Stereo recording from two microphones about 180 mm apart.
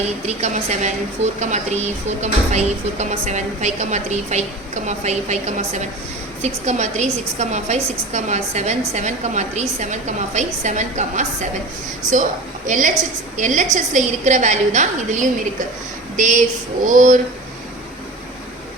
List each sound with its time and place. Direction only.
0.3 s a woman's voice: 40° right (ahead or behind)